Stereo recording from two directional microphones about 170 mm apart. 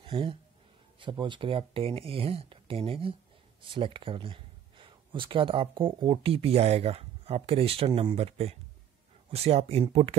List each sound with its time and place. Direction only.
0.0 s speech: 30° right (ahead or behind)